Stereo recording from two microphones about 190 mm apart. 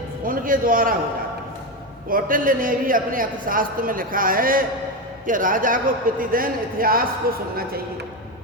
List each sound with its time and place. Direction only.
0.3 s a man's voice: 45° right (ahead or behind)
2.0 s a man's voice: 45° right (ahead or behind)